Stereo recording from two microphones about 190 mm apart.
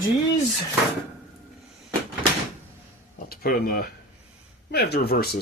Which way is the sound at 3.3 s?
50° left (ahead or behind).